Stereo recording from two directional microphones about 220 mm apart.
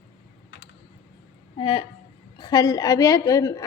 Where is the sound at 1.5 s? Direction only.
25° left (ahead or behind).